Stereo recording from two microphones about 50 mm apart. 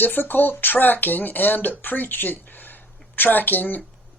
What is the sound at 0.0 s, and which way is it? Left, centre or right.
Speech, left.